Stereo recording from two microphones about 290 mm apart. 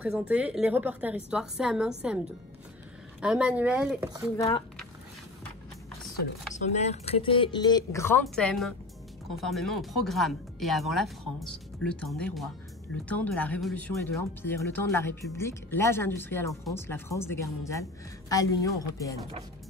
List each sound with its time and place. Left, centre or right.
0.0 s speech: centre
3.2 s speech: centre
4.4 s speech: centre
6.5 s speech: left